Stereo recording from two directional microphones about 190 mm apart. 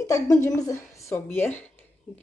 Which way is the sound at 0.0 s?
15° left (ahead or behind).